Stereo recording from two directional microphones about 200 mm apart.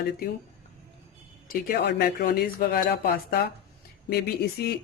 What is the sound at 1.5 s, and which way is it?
Speech, 45° left (ahead or behind).